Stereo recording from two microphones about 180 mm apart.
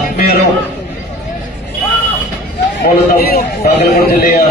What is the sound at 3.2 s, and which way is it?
A man's voice, 55° left (ahead or behind).